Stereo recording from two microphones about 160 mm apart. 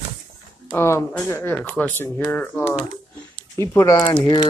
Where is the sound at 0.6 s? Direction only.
15° left (ahead or behind).